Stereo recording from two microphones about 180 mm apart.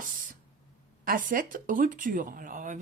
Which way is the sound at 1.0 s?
50° right (ahead or behind).